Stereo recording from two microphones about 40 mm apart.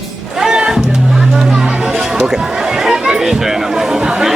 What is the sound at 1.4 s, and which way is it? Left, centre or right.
Chatter, centre.